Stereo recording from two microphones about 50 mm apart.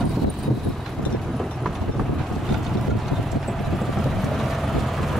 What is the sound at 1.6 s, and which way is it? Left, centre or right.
Vehicle, centre.